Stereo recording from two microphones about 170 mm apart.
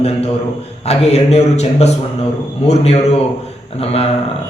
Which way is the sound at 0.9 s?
35° left (ahead or behind).